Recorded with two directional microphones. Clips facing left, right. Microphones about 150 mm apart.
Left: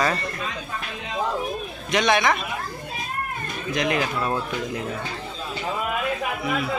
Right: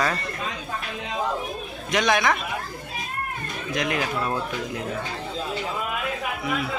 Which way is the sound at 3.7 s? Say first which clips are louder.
Left 2 dB; centre (ahead or behind).